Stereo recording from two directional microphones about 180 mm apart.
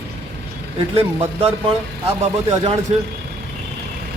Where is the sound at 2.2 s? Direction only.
35° right (ahead or behind).